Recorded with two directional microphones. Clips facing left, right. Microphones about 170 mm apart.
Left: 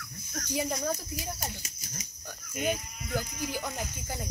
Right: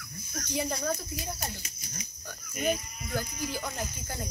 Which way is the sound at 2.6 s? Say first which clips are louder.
Right 1 dB; 15° left (ahead or behind).